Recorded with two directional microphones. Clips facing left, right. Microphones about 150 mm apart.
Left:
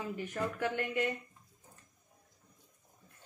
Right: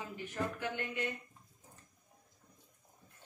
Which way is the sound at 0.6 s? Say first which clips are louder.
Left 5 dB; 55° left (ahead or behind).